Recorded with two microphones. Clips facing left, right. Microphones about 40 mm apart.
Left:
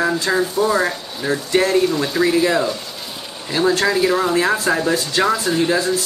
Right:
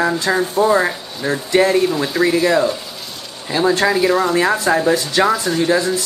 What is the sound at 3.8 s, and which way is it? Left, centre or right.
Speech, centre.